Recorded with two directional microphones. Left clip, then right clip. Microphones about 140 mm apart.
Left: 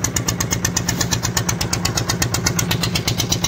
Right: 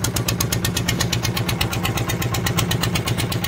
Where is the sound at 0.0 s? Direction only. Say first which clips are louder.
Left 1 dB; 80° right.